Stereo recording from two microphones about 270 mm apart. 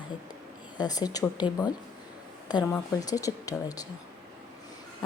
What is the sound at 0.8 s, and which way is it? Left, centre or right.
Speech, centre.